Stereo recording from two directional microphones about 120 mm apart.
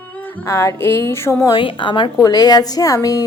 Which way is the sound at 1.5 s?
40° left (ahead or behind).